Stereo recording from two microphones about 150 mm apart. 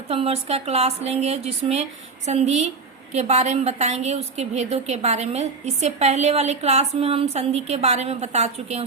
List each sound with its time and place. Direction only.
0.1 s a woman's voice: 40° right (ahead or behind)